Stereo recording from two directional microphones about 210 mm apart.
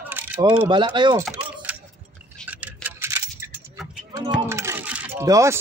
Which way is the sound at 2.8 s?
10° right (ahead or behind).